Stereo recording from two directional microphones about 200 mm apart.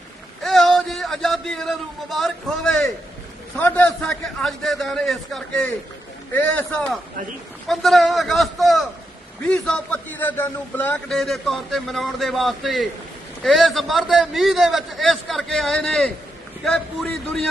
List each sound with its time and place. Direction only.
0.4 s a man's voice: centre (ahead or behind)